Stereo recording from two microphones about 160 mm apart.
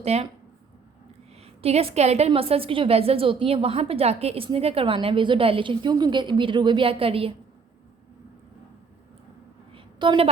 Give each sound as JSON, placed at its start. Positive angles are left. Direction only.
{"t": 0.0, "sound": "a woman's voice", "side_deg": -40}
{"t": 1.6, "sound": "a woman's voice", "side_deg": -40}
{"t": 9.7, "sound": "a sound", "side_deg": -30}